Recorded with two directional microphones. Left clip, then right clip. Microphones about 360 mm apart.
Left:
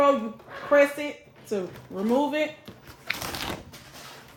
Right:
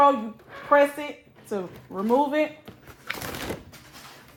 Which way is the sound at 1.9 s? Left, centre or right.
Centre.